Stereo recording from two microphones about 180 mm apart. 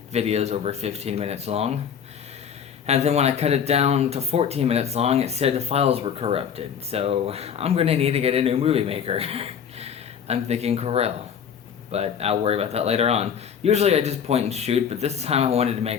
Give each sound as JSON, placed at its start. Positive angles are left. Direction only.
{"t": 0.1, "sound": "speech", "side_deg": -35}
{"t": 2.8, "sound": "speech", "side_deg": -35}